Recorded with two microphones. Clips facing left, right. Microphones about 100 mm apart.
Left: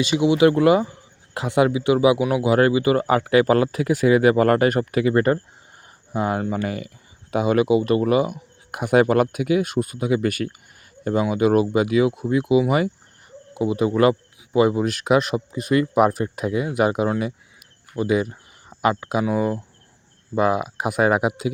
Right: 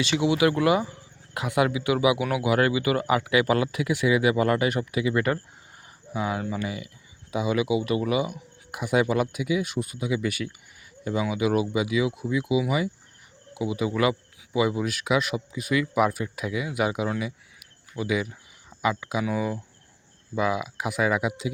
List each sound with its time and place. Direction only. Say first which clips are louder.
0.0 s speech: left 6 dB; 20° left (ahead or behind); by 17.1 s 45° left (ahead or behind)
17.2 s a sound: left 6 dB; 45° left (ahead or behind)
20.3 s speech: left 6 dB; 50° left (ahead or behind)